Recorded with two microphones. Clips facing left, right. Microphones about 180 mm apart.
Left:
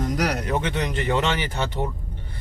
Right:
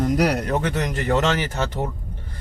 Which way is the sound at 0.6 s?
40° right (ahead or behind).